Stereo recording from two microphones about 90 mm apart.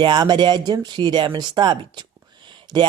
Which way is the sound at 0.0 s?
55° right (ahead or behind).